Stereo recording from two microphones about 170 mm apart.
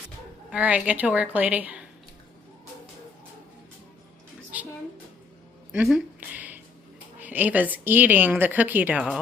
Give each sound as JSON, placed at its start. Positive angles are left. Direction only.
{"t": 0.5, "sound": "a woman's voice", "side_deg": -10}
{"t": 5.7, "sound": "a sound", "side_deg": -5}
{"t": 7.2, "sound": "a woman's voice", "side_deg": -10}